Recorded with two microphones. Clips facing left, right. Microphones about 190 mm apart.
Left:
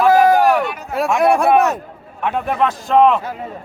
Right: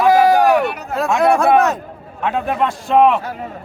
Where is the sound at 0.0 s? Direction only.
15° right (ahead or behind).